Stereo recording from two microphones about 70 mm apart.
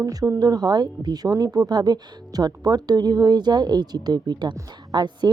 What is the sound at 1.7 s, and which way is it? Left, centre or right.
Speech, right.